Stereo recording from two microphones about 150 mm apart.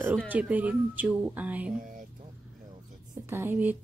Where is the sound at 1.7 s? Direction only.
60° right (ahead or behind).